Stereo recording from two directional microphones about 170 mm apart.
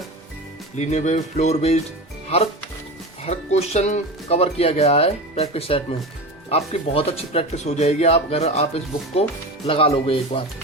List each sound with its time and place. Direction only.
0.8 s speech: 45° left (ahead or behind)
3.2 s speech: 40° left (ahead or behind)